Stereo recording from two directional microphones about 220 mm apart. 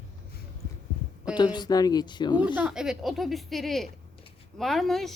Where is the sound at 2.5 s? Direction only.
5° right (ahead or behind).